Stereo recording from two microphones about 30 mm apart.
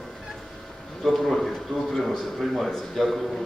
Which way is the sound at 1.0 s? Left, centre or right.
Centre.